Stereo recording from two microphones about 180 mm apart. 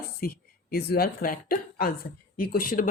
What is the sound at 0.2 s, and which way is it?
A woman's voice, 55° left (ahead or behind).